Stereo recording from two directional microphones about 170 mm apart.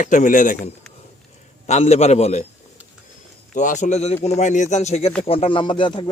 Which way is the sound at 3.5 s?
50° left (ahead or behind).